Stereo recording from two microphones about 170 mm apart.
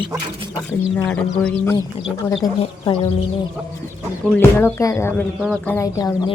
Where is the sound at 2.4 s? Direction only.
30° left (ahead or behind).